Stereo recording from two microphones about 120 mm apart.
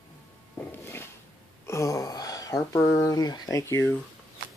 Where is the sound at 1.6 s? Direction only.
25° left (ahead or behind).